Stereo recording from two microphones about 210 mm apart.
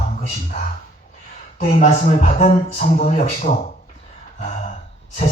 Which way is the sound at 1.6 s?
40° left (ahead or behind).